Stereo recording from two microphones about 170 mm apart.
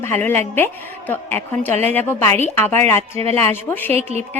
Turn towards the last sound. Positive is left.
turn(degrees=-40)  # may be behind; listen again after turning